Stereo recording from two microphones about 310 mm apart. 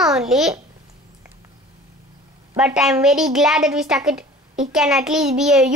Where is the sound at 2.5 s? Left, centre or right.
Centre.